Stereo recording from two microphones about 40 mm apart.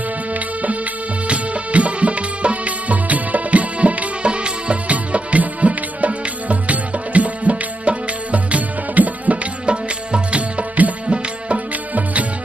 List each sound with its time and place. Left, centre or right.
0.3 s music: right
9.7 s music: right